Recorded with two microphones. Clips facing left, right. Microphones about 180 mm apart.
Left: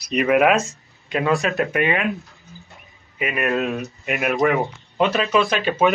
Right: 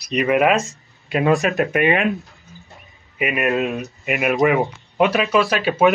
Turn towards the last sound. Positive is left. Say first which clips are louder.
# right 2 dB
turn(degrees=-10)  # may be behind; listen again after turning